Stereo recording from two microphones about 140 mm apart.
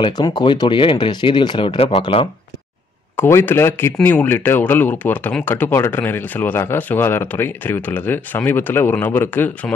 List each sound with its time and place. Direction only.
0.0 s speech: 30° left (ahead or behind); by 2.2 s 45° left (ahead or behind)
3.2 s speech: 15° left (ahead or behind)